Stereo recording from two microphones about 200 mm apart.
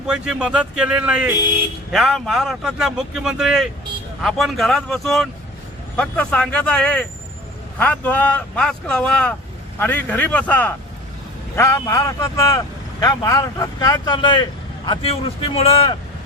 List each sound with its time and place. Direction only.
0.1 s a man's voice: 5° right (ahead or behind); by 16.0 s 30° left (ahead or behind)